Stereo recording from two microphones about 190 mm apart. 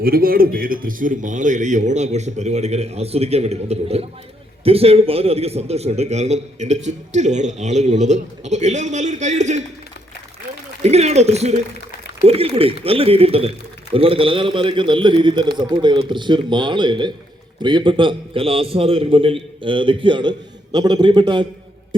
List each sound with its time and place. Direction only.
0.0 s a man's voice: 50° right (ahead or behind)
10.8 s a man's voice: 35° right (ahead or behind)